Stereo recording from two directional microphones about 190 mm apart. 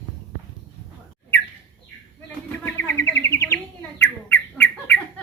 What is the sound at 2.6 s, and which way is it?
Bird, 10° left (ahead or behind).